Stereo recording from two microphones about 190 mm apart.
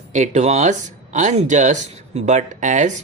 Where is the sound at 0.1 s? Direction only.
40° right (ahead or behind).